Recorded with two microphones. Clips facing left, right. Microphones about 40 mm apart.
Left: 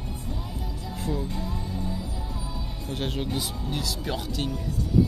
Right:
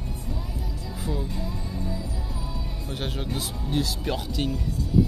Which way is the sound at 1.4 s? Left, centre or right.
Centre.